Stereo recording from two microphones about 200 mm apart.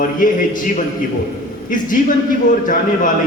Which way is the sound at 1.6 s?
40° left (ahead or behind).